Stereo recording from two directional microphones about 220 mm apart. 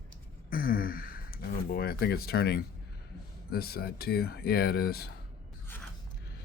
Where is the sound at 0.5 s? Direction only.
40° left (ahead or behind).